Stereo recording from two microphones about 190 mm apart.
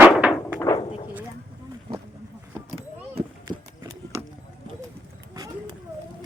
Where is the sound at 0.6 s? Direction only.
20° left (ahead or behind).